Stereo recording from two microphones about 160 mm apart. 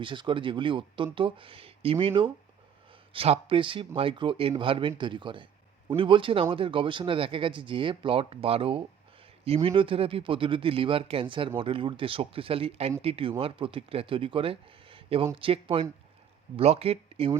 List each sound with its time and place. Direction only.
0.0 s speech: 30° right (ahead or behind)